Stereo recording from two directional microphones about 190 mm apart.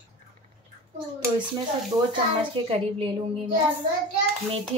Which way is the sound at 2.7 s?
30° right (ahead or behind).